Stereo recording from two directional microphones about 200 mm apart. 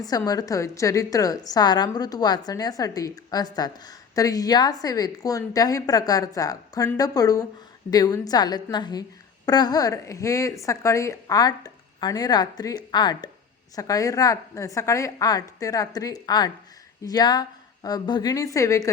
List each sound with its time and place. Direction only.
0.3 s a woman's voice: 15° left (ahead or behind)